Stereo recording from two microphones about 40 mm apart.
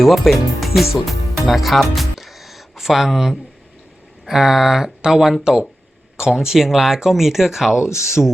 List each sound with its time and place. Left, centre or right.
0.0 s speech: centre